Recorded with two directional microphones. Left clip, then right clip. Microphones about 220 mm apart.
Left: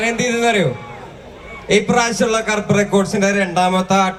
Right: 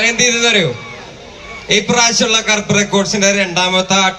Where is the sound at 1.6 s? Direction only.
55° left (ahead or behind).